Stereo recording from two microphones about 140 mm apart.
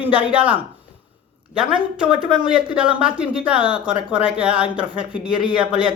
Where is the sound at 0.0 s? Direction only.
10° right (ahead or behind).